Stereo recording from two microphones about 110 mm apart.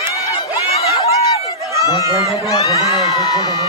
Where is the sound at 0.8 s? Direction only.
65° left (ahead or behind).